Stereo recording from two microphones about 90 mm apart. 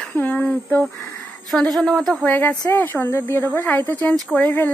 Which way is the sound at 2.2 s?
20° left (ahead or behind).